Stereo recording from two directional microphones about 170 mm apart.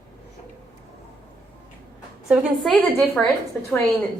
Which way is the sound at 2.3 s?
Centre (ahead or behind).